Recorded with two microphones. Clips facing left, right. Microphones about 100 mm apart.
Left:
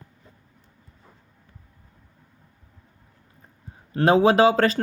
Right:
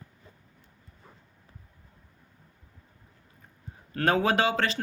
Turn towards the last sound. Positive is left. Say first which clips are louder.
# left 8 dB
turn(degrees=40)  # may be behind; listen again after turning